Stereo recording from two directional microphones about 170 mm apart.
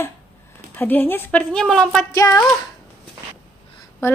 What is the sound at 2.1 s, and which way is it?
Speech, 20° left (ahead or behind).